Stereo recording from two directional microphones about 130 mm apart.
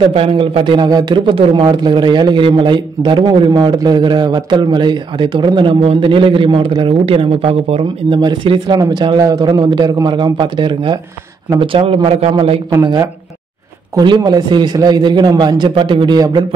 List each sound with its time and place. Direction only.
0.1 s speech: 45° right (ahead or behind)
8.2 s speech: 35° right (ahead or behind)
13.9 s speech: 30° right (ahead or behind)